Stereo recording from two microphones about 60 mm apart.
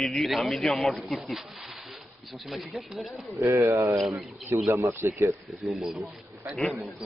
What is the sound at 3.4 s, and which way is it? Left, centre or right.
Speech, right.